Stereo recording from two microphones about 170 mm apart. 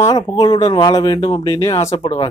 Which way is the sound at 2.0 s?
35° left (ahead or behind).